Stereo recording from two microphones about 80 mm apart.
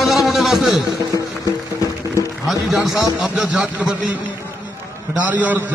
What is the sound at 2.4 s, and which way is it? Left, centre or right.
A man's voice, centre.